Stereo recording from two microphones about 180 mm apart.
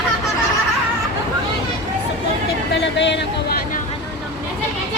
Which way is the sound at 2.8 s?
80° left.